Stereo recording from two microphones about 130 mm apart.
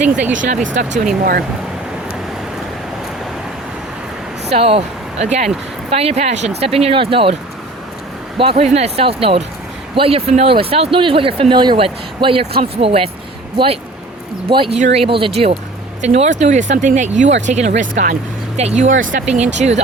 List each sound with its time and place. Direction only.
0.0 s speech: 10° right (ahead or behind)
0.3 s speech: 80° right
4.5 s speech: 50° right (ahead or behind)
8.4 s speech: 50° right (ahead or behind)
14.4 s speech: 45° right (ahead or behind); by 18.6 s 75° right (ahead or behind)
18.6 s speech: 55° right (ahead or behind)